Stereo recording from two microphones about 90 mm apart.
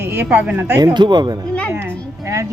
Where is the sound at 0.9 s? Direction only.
55° right (ahead or behind).